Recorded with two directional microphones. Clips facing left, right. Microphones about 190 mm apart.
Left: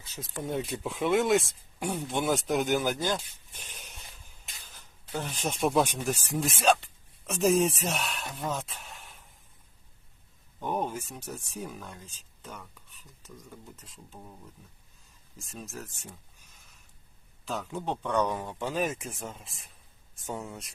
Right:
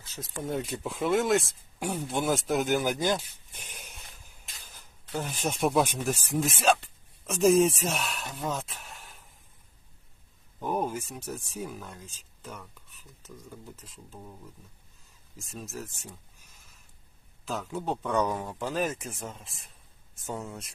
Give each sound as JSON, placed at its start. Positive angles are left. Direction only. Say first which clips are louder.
{"t": 0.4, "sound": "speech", "louder": "even", "side_deg": 0}
{"t": 10.6, "sound": "speech", "louder": "right 1 dB", "side_deg": -5}
{"t": 15.4, "sound": "speech", "louder": "right 2 dB", "side_deg": 0}
{"t": 17.4, "sound": "speech", "louder": "right 1 dB", "side_deg": 0}